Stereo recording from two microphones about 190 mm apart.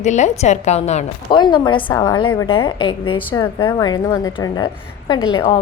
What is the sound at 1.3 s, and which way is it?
A woman's voice, 25° left (ahead or behind).